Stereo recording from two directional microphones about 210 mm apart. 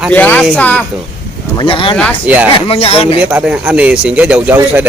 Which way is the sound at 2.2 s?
5° right (ahead or behind).